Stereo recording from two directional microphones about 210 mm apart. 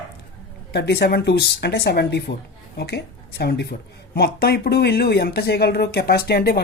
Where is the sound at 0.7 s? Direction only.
50° left (ahead or behind).